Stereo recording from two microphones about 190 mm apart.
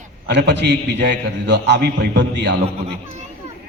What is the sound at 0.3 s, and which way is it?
A man's voice, 65° right (ahead or behind).